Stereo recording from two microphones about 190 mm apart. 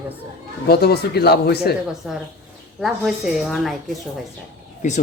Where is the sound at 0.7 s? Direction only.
55° left (ahead or behind).